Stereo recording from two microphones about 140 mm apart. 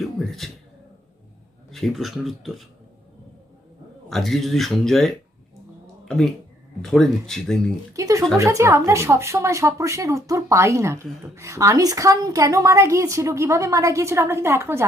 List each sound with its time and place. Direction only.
0.0 s a man's voice: centre (ahead or behind)
1.7 s speech: centre (ahead or behind)
4.1 s speech: centre (ahead or behind)
6.8 s speech: 5° left (ahead or behind)
7.9 s a sound: 20° right (ahead or behind)
8.4 s speech: 20° right (ahead or behind)